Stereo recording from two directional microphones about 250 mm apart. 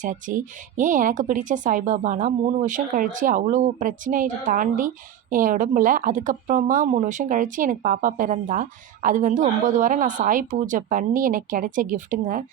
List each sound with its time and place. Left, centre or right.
0.0 s speech: right